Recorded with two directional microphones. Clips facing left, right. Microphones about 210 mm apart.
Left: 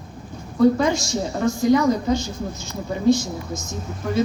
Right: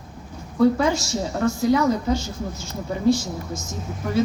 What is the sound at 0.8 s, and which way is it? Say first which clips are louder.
Speech: left 1 dB; 5° right (ahead or behind).